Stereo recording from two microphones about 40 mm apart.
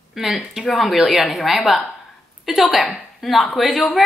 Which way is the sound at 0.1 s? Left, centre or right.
Centre.